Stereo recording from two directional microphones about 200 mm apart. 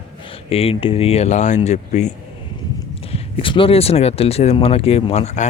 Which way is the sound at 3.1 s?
25° left (ahead or behind).